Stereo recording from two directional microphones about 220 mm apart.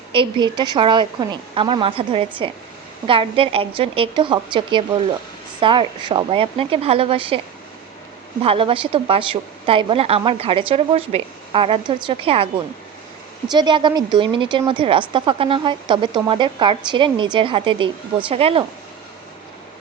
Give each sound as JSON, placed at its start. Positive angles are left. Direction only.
{"t": 0.1, "sound": "a woman's voice", "side_deg": -20}
{"t": 13.5, "sound": "a woman's voice", "side_deg": -20}